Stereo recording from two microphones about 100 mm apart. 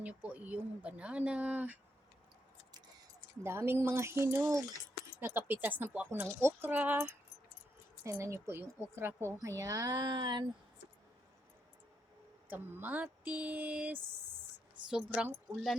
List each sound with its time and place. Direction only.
0.0 s speech: 15° right (ahead or behind)
3.4 s speech: 25° right (ahead or behind)
8.0 s speech: 30° right (ahead or behind); by 10.4 s 45° right (ahead or behind)
12.5 s a woman's voice: 20° right (ahead or behind)